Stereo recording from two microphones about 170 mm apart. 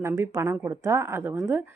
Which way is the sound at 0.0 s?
15° right (ahead or behind).